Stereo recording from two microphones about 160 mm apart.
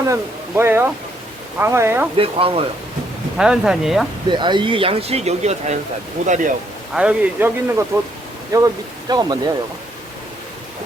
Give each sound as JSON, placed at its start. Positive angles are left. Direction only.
{"t": 0.0, "sound": "a man's voice", "side_deg": -15}
{"t": 2.1, "sound": "speech", "side_deg": -35}
{"t": 3.3, "sound": "speech", "side_deg": -5}
{"t": 4.3, "sound": "speech", "side_deg": -30}
{"t": 6.9, "sound": "a man's voice", "side_deg": -5}